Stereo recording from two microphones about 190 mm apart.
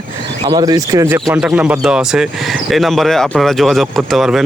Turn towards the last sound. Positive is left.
turn(degrees=0)  # may be behind; listen again after turning